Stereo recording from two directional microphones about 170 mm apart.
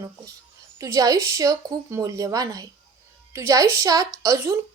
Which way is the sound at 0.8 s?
20° right (ahead or behind).